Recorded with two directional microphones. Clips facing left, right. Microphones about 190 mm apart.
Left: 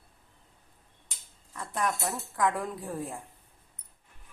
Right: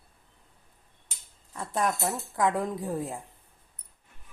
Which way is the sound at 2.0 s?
25° right (ahead or behind).